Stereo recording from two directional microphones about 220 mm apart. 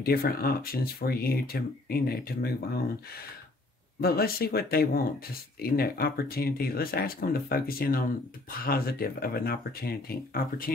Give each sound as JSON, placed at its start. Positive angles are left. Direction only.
{"t": 0.0, "sound": "speech", "side_deg": 45}